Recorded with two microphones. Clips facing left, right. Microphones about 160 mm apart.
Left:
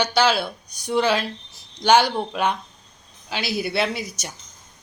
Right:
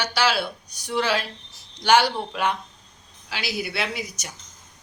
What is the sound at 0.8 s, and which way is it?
Speech, 15° left (ahead or behind).